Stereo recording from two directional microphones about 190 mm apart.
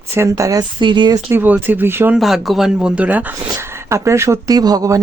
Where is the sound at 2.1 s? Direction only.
Centre (ahead or behind).